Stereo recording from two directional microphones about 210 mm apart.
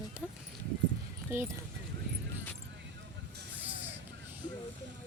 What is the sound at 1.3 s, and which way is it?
Speech, 10° right (ahead or behind).